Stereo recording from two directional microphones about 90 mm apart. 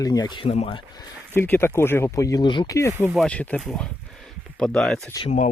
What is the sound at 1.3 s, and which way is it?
Speech, 25° left (ahead or behind).